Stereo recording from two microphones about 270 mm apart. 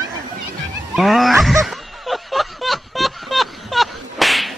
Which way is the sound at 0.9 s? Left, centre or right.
Centre.